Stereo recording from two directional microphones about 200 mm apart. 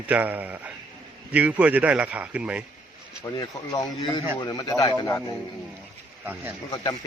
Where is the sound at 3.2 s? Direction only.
20° left (ahead or behind).